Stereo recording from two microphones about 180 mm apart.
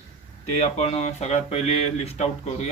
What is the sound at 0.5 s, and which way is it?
Speech, 40° left (ahead or behind).